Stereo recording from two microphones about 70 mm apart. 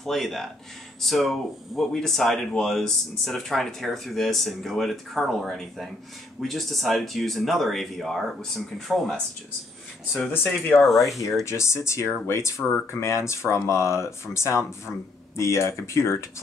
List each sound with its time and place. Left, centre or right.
0.0 s speech: centre
10.3 s speech: left
11.4 s speech: left